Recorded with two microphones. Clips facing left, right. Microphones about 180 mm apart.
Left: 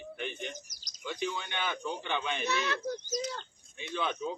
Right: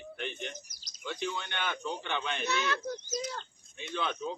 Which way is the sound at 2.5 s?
25° left (ahead or behind).